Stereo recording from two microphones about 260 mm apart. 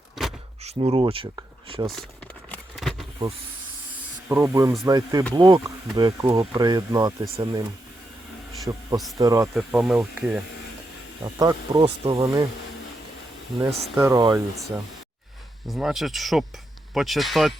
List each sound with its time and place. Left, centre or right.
0.6 s speech: right
1.9 s a sound: centre
4.3 s speech: centre
8.7 s speech: centre
9.6 s speech: centre
13.5 s speech: centre
13.9 s speech: centre
15.7 s speech: centre